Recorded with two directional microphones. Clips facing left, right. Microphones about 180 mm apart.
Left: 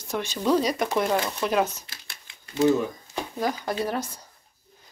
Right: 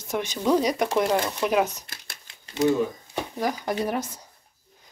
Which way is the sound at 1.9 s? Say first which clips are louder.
Right 2 dB; 45° right (ahead or behind).